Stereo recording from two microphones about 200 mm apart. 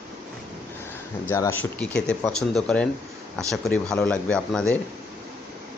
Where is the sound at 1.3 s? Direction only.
10° left (ahead or behind).